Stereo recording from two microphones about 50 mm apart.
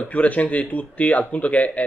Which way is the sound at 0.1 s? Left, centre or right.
Left.